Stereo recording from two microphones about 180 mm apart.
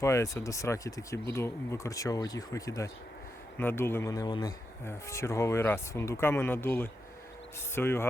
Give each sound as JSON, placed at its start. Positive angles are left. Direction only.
{"t": 0.0, "sound": "speech", "side_deg": 15}